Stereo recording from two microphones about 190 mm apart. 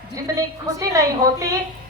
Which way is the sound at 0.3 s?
15° right (ahead or behind).